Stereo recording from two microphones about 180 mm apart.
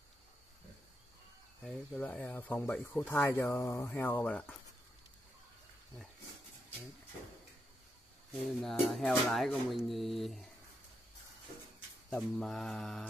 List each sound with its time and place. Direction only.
1.6 s speech: 5° left (ahead or behind)
8.6 s speech: centre (ahead or behind)
12.1 s speech: 5° left (ahead or behind)